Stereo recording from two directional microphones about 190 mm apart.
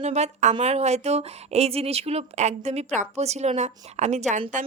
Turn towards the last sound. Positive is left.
turn(degrees=-40)  # may be behind; listen again after turning